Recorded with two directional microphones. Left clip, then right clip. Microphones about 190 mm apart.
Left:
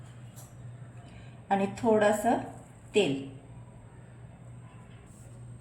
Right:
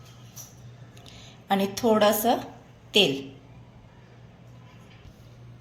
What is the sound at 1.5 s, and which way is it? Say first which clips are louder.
Speech: right 3 dB; 40° right (ahead or behind).